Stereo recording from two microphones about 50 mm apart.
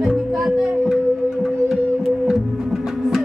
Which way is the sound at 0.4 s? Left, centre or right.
Centre.